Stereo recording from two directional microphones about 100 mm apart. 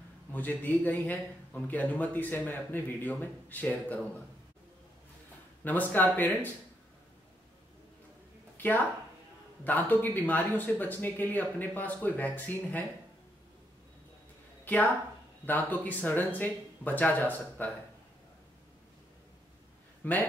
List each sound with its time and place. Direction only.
0.3 s a man's voice: 20° left (ahead or behind)
5.6 s speech: 15° left (ahead or behind)
9.7 s a man's voice: 20° left (ahead or behind)
14.6 s a sound: 15° left (ahead or behind)
15.4 s a man's voice: 15° left (ahead or behind)
20.0 s a man's voice: 15° left (ahead or behind)